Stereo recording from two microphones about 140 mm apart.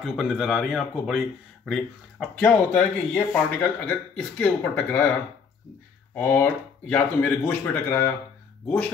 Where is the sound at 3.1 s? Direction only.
10° left (ahead or behind).